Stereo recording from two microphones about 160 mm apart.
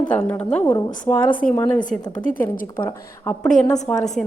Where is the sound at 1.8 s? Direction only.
55° left (ahead or behind).